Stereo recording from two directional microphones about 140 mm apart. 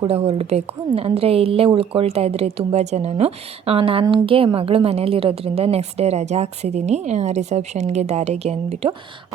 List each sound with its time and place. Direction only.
0.0 s a woman's voice: 45° right (ahead or behind)